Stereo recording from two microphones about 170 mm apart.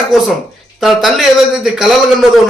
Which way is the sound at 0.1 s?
Centre (ahead or behind).